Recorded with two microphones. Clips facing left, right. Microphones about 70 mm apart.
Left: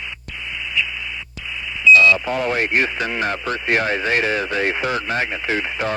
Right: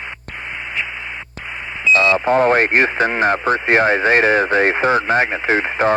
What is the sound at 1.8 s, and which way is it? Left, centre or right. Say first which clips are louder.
Speech: left 1 dB; right.